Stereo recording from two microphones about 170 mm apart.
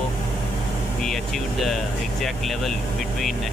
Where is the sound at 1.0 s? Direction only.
Centre (ahead or behind).